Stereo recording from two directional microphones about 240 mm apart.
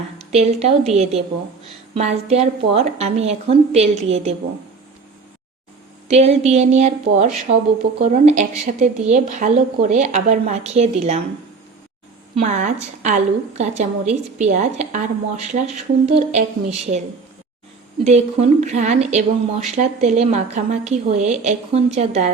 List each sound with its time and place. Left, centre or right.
0.2 s a woman's voice: right
2.3 s a woman's voice: right
6.1 s a woman's voice: right
12.3 s a woman's voice: right
18.0 s a woman's voice: right